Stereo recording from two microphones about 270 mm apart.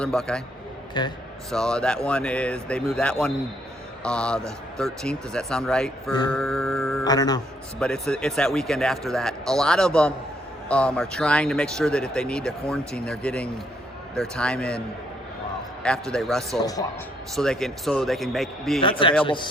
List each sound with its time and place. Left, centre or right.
0.0 s speech: centre
0.9 s a man's voice: centre
1.5 s speech: centre
6.3 s mantra: centre
7.0 s a man's voice: centre
7.8 s speech: centre
15.8 s speech: centre
18.8 s a man's voice: centre